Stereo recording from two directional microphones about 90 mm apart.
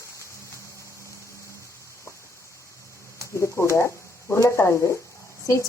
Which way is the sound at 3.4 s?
30° left (ahead or behind).